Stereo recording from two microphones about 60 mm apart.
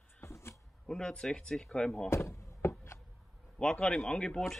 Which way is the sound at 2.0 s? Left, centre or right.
Left.